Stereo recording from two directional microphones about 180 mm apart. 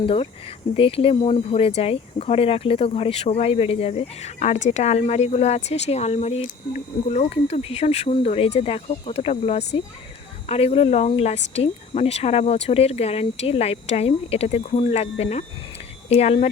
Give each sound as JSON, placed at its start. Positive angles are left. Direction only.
{"t": 0.0, "sound": "speech", "side_deg": 30}